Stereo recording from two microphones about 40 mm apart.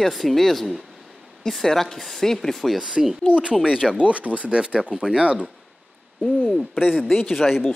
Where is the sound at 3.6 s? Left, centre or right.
Centre.